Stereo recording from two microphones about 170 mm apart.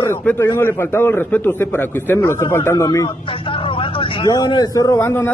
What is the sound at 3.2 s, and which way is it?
Speech, 30° left (ahead or behind).